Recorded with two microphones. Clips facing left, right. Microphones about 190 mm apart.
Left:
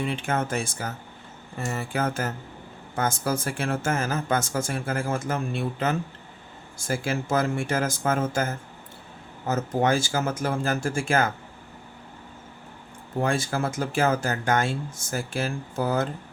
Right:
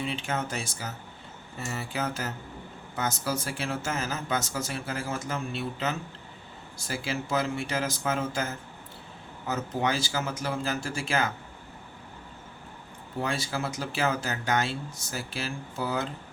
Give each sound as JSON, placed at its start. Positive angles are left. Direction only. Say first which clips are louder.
{"t": 0.0, "sound": "speech", "louder": "left 4 dB", "side_deg": 55}
{"t": 13.1, "sound": "speech", "louder": "left 5 dB", "side_deg": 50}